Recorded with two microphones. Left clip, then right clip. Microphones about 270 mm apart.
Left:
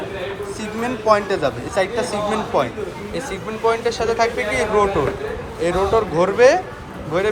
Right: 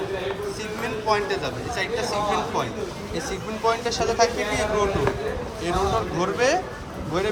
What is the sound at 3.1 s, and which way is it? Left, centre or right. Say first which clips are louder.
Speech: left 3 dB; centre.